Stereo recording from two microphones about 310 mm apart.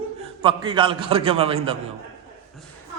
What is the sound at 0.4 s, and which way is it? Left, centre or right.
A man's voice, centre.